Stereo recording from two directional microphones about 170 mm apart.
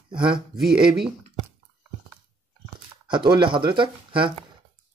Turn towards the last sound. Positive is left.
turn(degrees=-30)  # may be behind; listen again after turning